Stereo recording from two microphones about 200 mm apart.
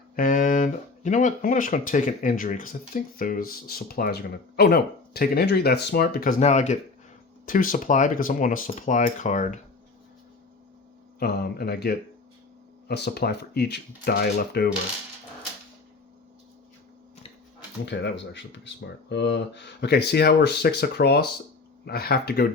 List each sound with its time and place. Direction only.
0.2 s speech: 40° left (ahead or behind)
11.2 s speech: 50° left (ahead or behind)
17.8 s speech: 60° left (ahead or behind)